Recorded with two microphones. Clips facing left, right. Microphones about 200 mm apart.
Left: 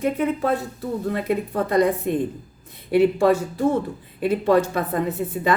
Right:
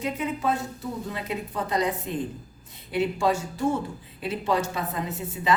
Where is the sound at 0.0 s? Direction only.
60° left (ahead or behind).